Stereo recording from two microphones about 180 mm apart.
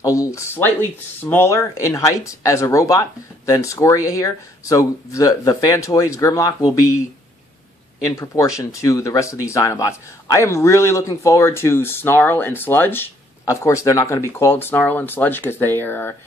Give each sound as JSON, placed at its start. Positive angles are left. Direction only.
{"t": 0.0, "sound": "speech", "side_deg": 20}
{"t": 8.2, "sound": "speech", "side_deg": 15}